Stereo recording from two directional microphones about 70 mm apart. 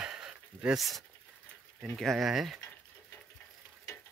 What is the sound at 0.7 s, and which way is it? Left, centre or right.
Speech, centre.